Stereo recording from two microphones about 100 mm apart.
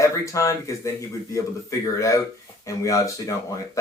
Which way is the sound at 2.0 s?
30° left (ahead or behind).